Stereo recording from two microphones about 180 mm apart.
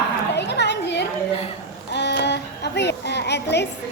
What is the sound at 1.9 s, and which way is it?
Child singing, 70° left (ahead or behind).